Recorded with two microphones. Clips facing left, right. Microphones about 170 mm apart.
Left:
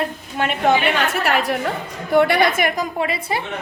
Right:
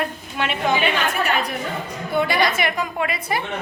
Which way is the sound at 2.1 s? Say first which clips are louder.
Left 5 dB; 65° left (ahead or behind).